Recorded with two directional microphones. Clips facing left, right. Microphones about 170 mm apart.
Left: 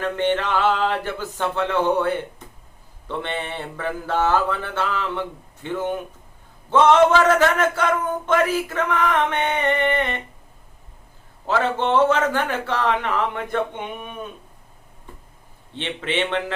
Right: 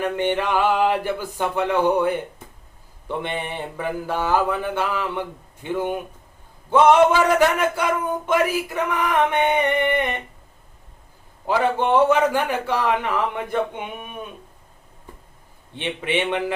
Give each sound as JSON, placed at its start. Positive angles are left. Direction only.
{"t": 0.0, "sound": "speech", "side_deg": -10}
{"t": 11.4, "sound": "speech", "side_deg": -10}
{"t": 15.7, "sound": "speech", "side_deg": -15}